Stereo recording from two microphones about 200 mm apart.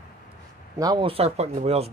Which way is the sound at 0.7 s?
20° right (ahead or behind).